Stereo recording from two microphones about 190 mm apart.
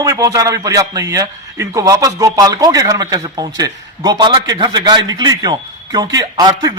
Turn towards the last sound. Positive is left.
turn(degrees=-20)  # may be behind; listen again after turning